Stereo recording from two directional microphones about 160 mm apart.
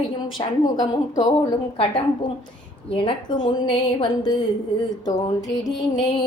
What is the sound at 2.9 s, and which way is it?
A woman's voice, 30° left (ahead or behind).